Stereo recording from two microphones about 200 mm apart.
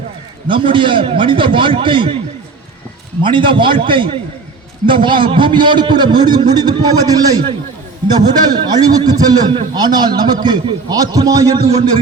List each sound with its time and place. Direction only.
0.4 s a man's voice: 25° right (ahead or behind)
3.2 s a man's voice: 25° right (ahead or behind)